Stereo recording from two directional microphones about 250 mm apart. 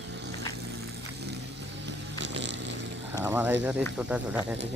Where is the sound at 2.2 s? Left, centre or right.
Right.